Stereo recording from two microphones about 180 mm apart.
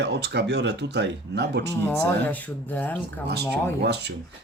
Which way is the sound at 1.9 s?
10° left (ahead or behind).